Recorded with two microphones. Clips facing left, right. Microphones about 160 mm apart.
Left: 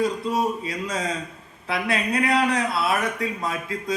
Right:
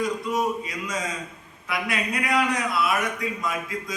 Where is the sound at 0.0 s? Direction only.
30° left (ahead or behind).